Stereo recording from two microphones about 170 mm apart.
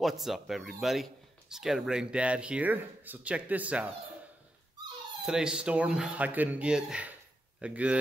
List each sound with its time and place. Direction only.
0.0 s speech: centre (ahead or behind)
5.2 s speech: 5° right (ahead or behind)